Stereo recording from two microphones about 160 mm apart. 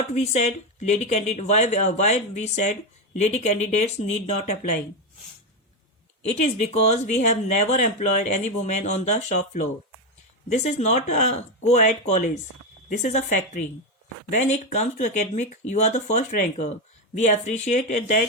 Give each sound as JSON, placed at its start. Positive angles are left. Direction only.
{"t": 0.1, "sound": "speech", "side_deg": 45}
{"t": 6.2, "sound": "speech", "side_deg": 45}